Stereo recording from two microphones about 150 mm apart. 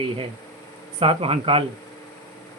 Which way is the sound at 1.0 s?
40° right (ahead or behind).